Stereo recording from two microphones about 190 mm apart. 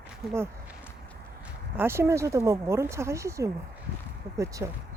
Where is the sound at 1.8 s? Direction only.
15° right (ahead or behind).